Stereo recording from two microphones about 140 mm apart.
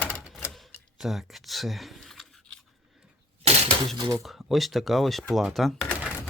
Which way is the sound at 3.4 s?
45° right (ahead or behind).